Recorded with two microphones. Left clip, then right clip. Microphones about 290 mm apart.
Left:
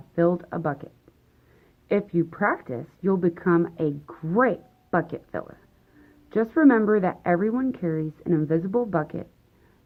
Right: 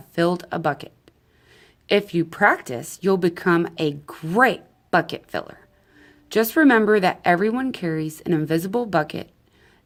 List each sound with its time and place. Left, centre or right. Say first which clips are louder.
0.2 s speech: right 2 dB; right
1.9 s speech: right 4 dB; right